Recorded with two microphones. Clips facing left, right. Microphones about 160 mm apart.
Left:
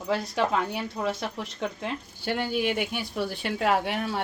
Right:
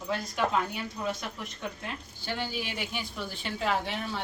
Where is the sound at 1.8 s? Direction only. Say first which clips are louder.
Left 7 dB; 60° left (ahead or behind).